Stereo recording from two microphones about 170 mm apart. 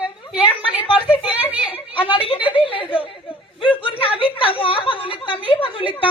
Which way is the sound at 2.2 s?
35° left (ahead or behind).